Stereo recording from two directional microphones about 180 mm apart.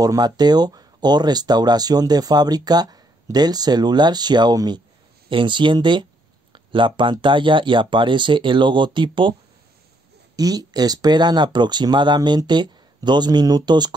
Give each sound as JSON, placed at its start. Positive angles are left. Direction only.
{"t": 0.0, "sound": "speech", "side_deg": -20}
{"t": 10.3, "sound": "speech", "side_deg": -20}